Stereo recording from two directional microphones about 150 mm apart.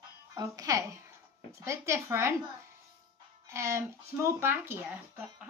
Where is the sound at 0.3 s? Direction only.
25° right (ahead or behind).